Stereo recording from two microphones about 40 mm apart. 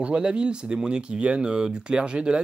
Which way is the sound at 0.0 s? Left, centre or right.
Right.